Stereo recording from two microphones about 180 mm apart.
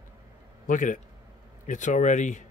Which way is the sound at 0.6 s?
45° left (ahead or behind).